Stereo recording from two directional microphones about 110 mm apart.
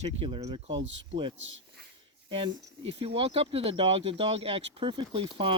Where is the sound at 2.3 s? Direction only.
55° right (ahead or behind).